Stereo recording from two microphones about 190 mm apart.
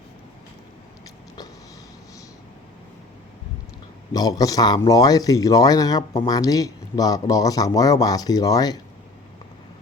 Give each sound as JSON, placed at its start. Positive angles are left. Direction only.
{"t": 4.1, "sound": "speech", "side_deg": 20}